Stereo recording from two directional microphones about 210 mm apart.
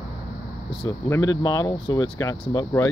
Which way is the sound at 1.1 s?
20° left (ahead or behind).